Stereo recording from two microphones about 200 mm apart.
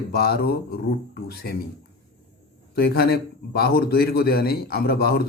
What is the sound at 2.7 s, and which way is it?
A man's voice, 50° left (ahead or behind).